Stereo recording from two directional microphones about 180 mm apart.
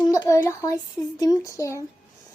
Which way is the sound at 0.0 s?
20° left (ahead or behind).